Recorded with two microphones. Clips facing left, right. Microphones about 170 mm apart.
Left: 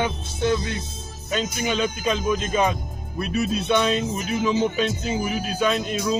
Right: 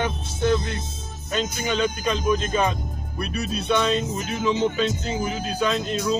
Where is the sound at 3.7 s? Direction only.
10° left (ahead or behind).